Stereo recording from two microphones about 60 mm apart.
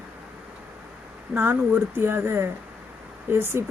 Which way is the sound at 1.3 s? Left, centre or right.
Right.